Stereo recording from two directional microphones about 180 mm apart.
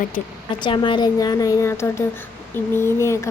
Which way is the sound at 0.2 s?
40° left (ahead or behind).